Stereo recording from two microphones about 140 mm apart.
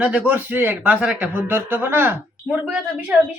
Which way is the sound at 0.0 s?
10° right (ahead or behind).